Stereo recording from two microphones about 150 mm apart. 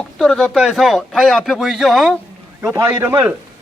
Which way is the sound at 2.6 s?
20° right (ahead or behind).